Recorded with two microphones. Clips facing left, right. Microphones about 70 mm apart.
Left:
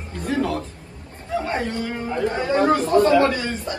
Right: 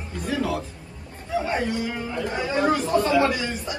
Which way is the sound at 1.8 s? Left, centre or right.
Left.